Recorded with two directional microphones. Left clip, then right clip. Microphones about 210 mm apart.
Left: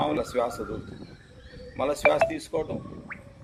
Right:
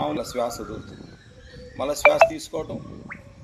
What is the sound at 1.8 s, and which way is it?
Speech, centre (ahead or behind).